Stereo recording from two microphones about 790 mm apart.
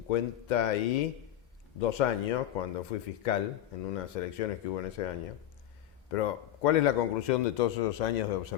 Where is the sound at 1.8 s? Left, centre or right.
Left.